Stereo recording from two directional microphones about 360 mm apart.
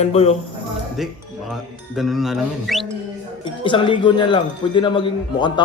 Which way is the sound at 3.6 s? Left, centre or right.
Centre.